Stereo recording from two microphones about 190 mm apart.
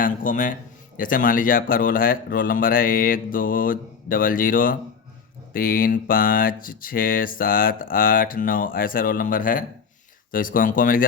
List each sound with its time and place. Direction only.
0.0 s a man's voice: 45° left (ahead or behind)